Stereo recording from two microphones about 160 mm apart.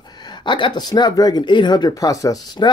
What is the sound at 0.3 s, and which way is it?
Speech, 30° left (ahead or behind).